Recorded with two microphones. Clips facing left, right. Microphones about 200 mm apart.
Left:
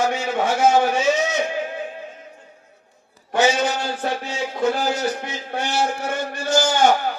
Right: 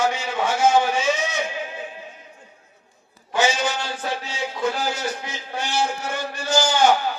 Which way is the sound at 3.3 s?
55° left (ahead or behind).